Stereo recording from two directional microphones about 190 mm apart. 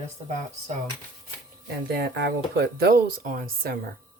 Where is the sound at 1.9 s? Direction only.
60° right (ahead or behind).